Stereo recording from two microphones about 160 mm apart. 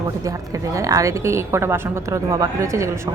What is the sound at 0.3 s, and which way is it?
A woman's voice, 20° right (ahead or behind).